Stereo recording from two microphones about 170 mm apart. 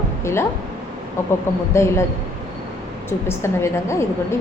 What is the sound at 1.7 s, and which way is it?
Speech, 15° left (ahead or behind).